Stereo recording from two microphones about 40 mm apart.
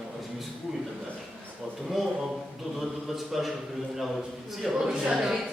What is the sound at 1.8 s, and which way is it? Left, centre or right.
A man's voice, centre.